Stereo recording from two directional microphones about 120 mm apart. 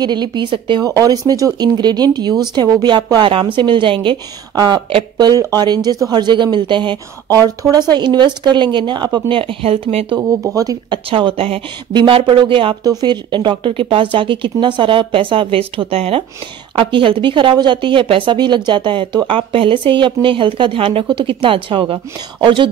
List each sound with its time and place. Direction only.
0.0 s speech: 40° right (ahead or behind); by 10.1 s 55° right (ahead or behind)
10.1 s speech: 30° right (ahead or behind)
11.1 s speech: 50° right (ahead or behind)
11.9 s speech: 40° right (ahead or behind)